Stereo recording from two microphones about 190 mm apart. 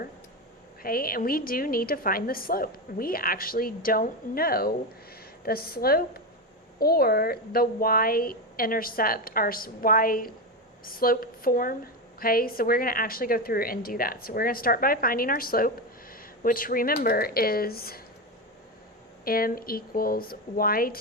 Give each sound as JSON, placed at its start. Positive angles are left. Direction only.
{"t": 0.8, "sound": "a woman's voice", "side_deg": 50}
{"t": 19.2, "sound": "a woman's voice", "side_deg": 50}